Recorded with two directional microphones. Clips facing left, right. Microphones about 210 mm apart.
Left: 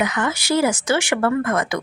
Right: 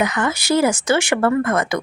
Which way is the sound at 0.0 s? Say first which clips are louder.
Right 2 dB; 40° right (ahead or behind).